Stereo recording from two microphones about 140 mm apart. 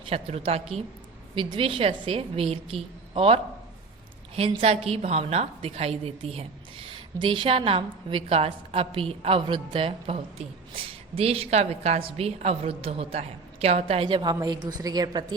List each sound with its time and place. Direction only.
0.1 s a woman's voice: 45° right (ahead or behind); by 15.4 s 30° right (ahead or behind)